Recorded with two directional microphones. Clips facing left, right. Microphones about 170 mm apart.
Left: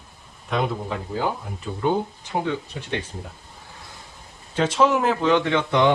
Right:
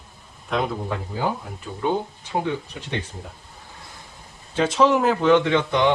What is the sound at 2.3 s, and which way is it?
Speech, 15° right (ahead or behind).